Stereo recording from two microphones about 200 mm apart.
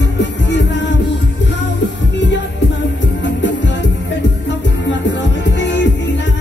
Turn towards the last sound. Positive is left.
turn(degrees=60)  # may be behind; listen again after turning